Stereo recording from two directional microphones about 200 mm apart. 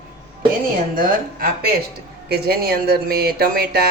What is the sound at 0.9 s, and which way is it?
Speech, 45° right (ahead or behind).